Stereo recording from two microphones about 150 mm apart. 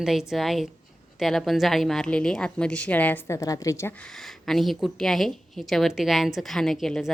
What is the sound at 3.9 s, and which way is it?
A woman's voice, 5° left (ahead or behind).